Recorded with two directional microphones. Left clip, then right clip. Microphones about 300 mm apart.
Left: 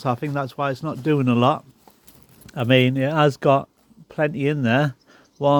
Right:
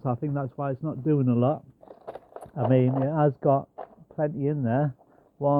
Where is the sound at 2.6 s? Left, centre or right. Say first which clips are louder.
Left 5 dB; left.